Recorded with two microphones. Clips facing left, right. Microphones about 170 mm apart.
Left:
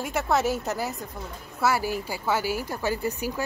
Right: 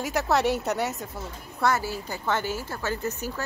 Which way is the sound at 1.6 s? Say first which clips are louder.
Left 1 dB; 10° left (ahead or behind).